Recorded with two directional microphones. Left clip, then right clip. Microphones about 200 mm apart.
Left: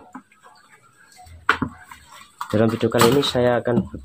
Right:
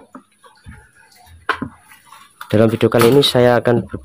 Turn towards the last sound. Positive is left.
turn(degrees=-45)  # may be behind; listen again after turning